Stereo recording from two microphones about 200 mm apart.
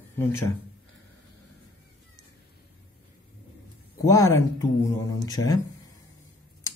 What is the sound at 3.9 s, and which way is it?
Speech, 15° left (ahead or behind).